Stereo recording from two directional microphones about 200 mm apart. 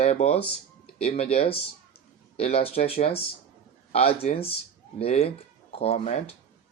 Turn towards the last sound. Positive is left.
turn(degrees=30)  # may be behind; listen again after turning